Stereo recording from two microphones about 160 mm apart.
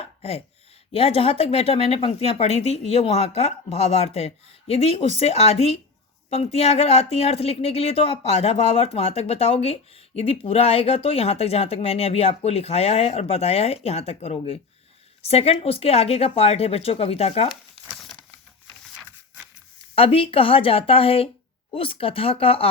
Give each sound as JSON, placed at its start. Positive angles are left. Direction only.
{"t": 0.0, "sound": "a sound", "side_deg": 40}
{"t": 0.9, "sound": "speech", "side_deg": 40}
{"t": 17.9, "sound": "crumpling", "side_deg": 0}
{"t": 20.0, "sound": "speech", "side_deg": 35}